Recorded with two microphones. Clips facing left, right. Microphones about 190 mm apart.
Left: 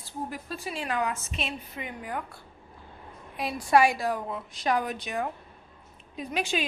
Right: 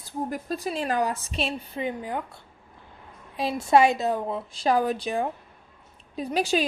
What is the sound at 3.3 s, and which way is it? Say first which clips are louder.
A woman's voice: right 3 dB; 25° right (ahead or behind).